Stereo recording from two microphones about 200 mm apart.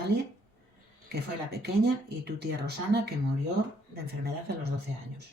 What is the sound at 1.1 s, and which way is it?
Speech, 55° right (ahead or behind).